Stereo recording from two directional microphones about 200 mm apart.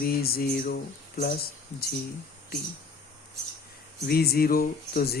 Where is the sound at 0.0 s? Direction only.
50° left (ahead or behind).